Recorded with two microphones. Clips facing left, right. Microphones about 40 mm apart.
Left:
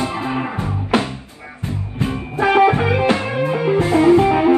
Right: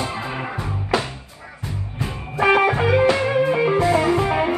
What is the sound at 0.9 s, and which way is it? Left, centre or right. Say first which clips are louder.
Music: left 4 dB; left.